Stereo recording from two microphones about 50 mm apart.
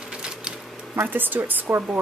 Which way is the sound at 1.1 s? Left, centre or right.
Right.